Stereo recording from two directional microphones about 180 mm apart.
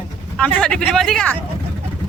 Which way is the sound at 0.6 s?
5° left (ahead or behind).